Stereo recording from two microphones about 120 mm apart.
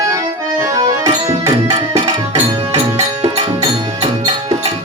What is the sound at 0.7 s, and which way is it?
Music, 30° right (ahead or behind).